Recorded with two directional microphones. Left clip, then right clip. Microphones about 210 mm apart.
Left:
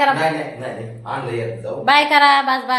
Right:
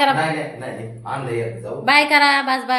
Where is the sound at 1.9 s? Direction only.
15° right (ahead or behind).